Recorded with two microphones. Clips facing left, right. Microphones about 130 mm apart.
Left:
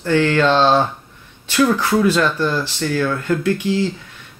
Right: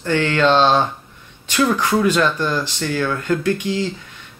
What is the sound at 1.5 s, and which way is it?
Speech, 15° right (ahead or behind).